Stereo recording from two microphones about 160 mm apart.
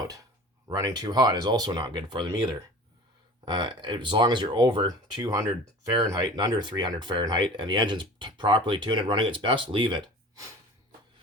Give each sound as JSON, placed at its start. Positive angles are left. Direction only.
{"t": 0.7, "sound": "speech", "side_deg": -25}